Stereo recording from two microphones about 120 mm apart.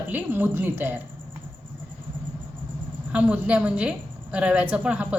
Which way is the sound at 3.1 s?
10° right (ahead or behind).